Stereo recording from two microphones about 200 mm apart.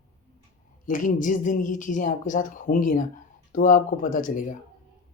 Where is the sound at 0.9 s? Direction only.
40° left (ahead or behind).